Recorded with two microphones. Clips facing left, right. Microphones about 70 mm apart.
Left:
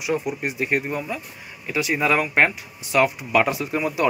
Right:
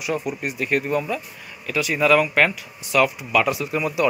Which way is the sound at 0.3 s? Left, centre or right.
Left.